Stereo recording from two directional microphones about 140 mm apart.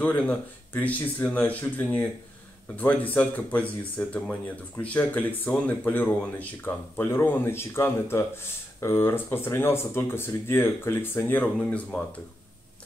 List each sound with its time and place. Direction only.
0.0 s speech: 10° left (ahead or behind)